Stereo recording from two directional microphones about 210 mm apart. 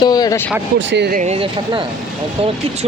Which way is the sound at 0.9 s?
50° right (ahead or behind).